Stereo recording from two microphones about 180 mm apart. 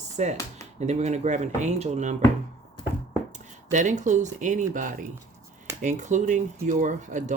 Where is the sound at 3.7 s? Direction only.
45° right (ahead or behind).